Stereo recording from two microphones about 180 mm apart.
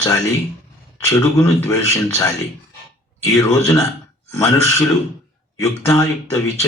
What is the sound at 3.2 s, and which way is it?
Speech, 15° left (ahead or behind).